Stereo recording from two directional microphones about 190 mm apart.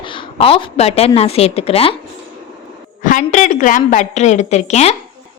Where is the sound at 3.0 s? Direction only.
40° left (ahead or behind).